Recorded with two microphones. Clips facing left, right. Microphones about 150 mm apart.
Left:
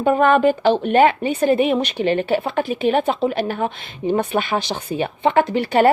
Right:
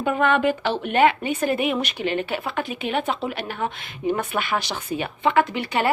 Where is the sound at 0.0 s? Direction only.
40° left (ahead or behind).